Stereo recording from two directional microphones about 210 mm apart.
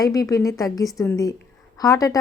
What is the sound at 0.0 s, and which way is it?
Speech, 15° left (ahead or behind).